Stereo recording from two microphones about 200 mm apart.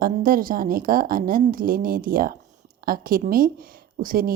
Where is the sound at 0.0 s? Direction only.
45° right (ahead or behind).